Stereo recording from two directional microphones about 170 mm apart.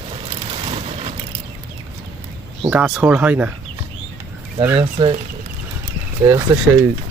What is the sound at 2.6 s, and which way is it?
Speech, 5° right (ahead or behind).